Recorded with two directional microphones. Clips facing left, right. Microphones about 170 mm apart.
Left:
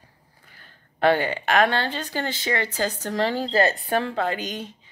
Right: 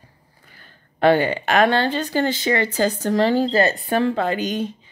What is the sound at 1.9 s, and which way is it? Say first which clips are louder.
Speech: right 7 dB; 45° right (ahead or behind).